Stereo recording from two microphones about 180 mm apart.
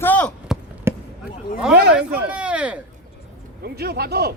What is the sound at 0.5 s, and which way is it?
Basketball bounce, 5° right (ahead or behind).